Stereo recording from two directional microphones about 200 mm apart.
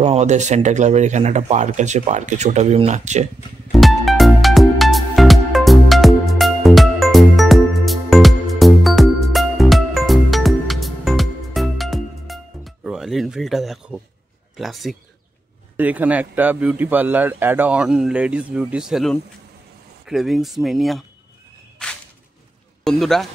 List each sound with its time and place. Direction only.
0.0 s speech: 35° right (ahead or behind)
3.7 s music: centre (ahead or behind)
14.6 s a man's voice: centre (ahead or behind)
21.8 s whip: 5° left (ahead or behind)
22.8 s speech: centre (ahead or behind)